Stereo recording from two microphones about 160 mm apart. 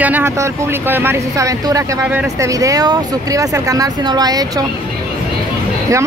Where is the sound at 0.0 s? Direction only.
15° right (ahead or behind).